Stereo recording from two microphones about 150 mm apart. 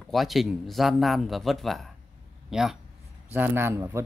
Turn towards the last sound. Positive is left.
turn(degrees=-20)  # may be behind; listen again after turning